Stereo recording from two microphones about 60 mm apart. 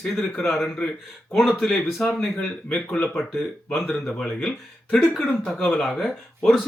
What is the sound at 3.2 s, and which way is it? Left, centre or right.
Speech, centre.